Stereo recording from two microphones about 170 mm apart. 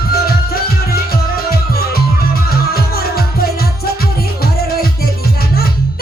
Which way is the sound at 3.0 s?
65° left (ahead or behind).